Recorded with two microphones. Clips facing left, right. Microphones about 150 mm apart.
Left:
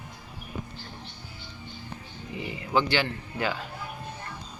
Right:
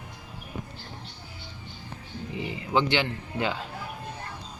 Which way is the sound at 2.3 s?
25° right (ahead or behind).